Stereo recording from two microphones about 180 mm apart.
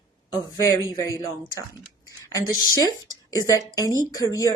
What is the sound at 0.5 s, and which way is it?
Speech, 20° left (ahead or behind).